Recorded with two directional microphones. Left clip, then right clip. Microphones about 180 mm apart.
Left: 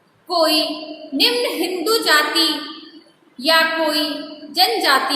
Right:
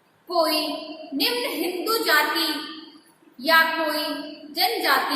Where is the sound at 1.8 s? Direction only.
35° left (ahead or behind).